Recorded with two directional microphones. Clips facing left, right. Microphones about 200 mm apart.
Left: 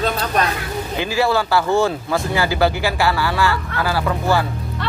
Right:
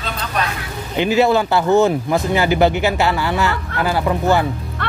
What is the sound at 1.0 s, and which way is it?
Speech, 20° right (ahead or behind).